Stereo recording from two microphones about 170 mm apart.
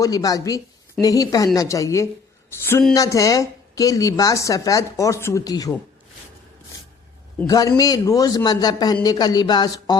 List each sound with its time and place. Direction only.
0.0 s a woman's voice: 20° left (ahead or behind)
7.4 s a woman's voice: 20° left (ahead or behind)